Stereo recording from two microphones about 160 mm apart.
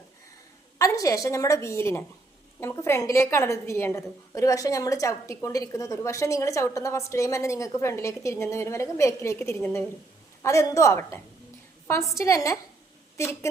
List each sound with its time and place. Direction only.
0.8 s a woman's voice: 20° left (ahead or behind)